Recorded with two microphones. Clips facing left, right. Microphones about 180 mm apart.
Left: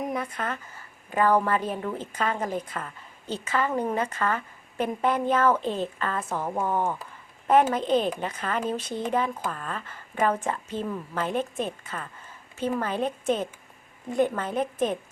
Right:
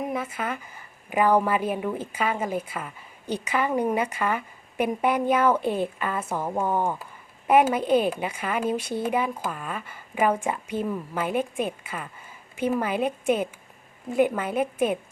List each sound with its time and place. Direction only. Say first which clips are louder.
0.0 s a woman's voice: right 1 dB; 5° right (ahead or behind)